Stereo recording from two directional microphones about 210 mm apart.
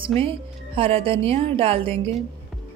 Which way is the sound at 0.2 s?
25° right (ahead or behind).